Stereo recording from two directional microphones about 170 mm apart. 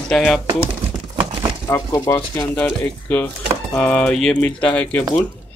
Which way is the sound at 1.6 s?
20° left (ahead or behind).